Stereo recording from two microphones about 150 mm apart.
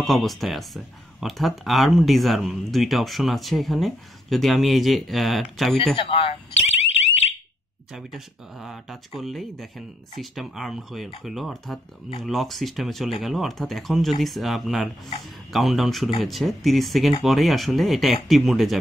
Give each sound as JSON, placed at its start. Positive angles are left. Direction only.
{"t": 0.0, "sound": "speech", "side_deg": 0}
{"t": 5.9, "sound": "alarm", "side_deg": 35}
{"t": 7.9, "sound": "speech", "side_deg": 0}